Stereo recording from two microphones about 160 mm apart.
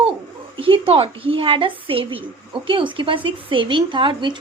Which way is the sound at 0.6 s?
35° right (ahead or behind).